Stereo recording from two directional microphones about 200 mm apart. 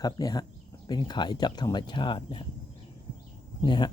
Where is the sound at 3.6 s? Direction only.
25° left (ahead or behind).